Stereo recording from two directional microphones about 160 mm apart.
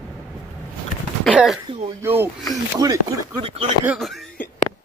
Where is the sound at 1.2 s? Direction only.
Centre (ahead or behind).